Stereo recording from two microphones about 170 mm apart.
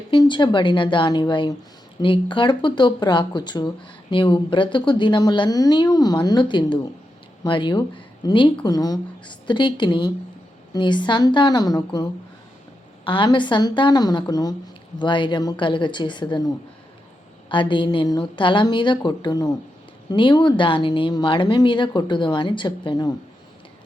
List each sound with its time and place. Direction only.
0.1 s speech: 25° left (ahead or behind)
13.1 s speech: 30° left (ahead or behind)
17.5 s speech: 30° left (ahead or behind)